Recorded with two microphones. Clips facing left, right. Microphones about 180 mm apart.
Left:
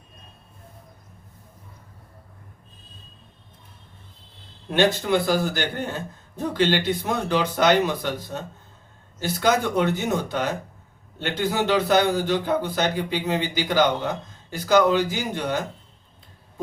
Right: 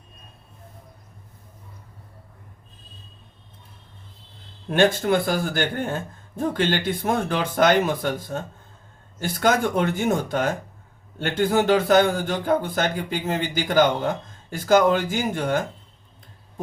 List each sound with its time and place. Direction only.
4.7 s a man's voice: 50° right (ahead or behind)